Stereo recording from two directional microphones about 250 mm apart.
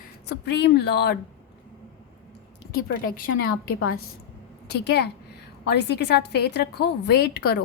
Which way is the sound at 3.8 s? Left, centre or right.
Left.